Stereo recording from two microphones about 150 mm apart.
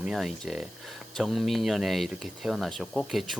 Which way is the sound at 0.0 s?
5° right (ahead or behind).